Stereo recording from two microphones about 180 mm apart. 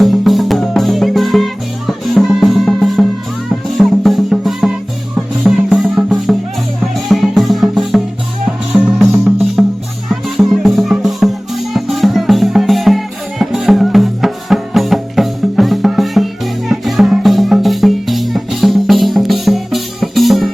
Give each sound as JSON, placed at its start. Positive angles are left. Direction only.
{"t": 0.0, "sound": "music", "side_deg": 0}